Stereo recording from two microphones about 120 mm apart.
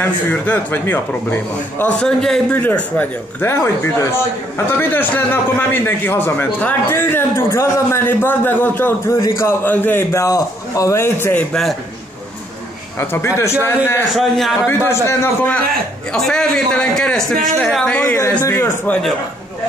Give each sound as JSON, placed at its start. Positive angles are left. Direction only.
{"t": 0.0, "sound": "a man's voice", "side_deg": 15}
{"t": 13.1, "sound": "a man's voice", "side_deg": 20}
{"t": 14.1, "sound": "a man's voice", "side_deg": 0}
{"t": 15.0, "sound": "a man's voice", "side_deg": 20}
{"t": 16.1, "sound": "a man's voice", "side_deg": 5}
{"t": 17.9, "sound": "a man's voice", "side_deg": 20}
{"t": 18.9, "sound": "speech", "side_deg": 5}